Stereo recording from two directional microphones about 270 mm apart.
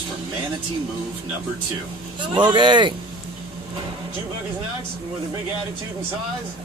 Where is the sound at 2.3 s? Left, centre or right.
Centre.